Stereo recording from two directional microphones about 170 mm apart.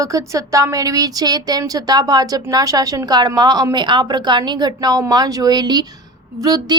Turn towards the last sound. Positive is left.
turn(degrees=-25)  # may be behind; listen again after turning